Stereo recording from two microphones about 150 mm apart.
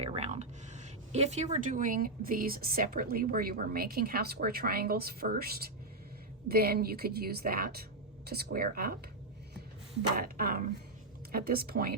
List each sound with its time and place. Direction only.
0.0 s a woman's voice: 45° right (ahead or behind); by 9.0 s 75° right (ahead or behind)
10.2 s speech: 80° right